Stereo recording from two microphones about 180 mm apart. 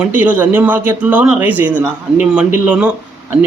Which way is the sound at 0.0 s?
10° right (ahead or behind).